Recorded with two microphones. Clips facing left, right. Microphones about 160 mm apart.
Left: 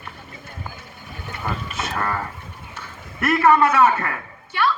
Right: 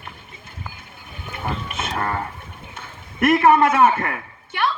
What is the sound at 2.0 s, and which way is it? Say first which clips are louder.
Speech: right 1 dB; 25° right (ahead or behind).